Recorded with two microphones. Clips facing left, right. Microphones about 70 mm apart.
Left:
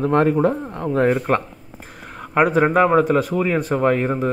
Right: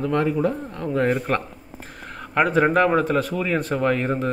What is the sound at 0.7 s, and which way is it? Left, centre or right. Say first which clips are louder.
Speech: left 4 dB; left.